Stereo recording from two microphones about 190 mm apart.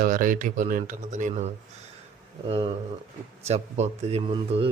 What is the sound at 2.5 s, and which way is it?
Speech, 30° right (ahead or behind).